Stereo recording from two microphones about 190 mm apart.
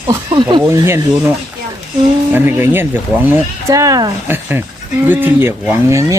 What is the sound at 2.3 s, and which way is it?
Speech, 10° right (ahead or behind).